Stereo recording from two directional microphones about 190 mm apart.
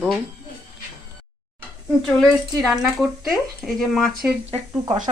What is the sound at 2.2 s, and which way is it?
Speech, centre (ahead or behind).